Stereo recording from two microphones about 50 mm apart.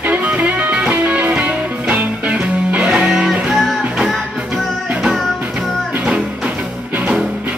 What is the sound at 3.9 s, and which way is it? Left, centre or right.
Music, centre.